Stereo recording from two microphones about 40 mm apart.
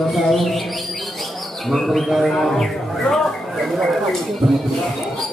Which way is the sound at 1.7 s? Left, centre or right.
Centre.